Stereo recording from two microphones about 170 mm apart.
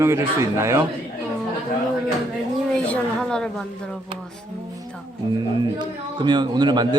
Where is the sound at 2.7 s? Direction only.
5° left (ahead or behind).